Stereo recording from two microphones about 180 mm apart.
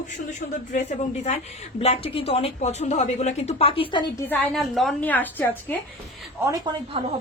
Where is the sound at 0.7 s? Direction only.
40° left (ahead or behind); by 4.2 s 25° left (ahead or behind).